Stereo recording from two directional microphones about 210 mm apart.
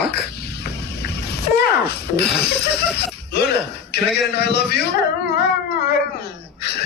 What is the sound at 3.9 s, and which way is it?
Speech, 50° left (ahead or behind).